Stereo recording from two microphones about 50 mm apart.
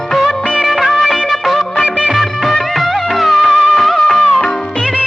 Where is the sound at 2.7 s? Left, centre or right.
Centre.